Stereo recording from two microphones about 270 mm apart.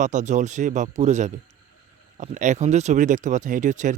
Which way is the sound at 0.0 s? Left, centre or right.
Right.